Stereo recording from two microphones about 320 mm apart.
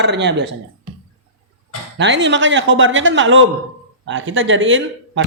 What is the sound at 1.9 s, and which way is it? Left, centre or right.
Speech, right.